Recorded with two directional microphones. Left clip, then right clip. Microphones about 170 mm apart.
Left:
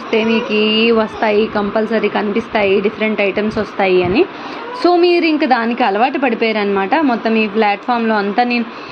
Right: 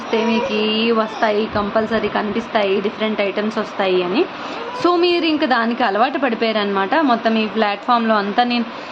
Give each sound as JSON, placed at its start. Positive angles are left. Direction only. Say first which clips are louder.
{"t": 0.3, "sound": "mantra", "louder": "left 3 dB", "side_deg": -35}
{"t": 0.6, "sound": "a woman's voice", "louder": "left 7 dB", "side_deg": 15}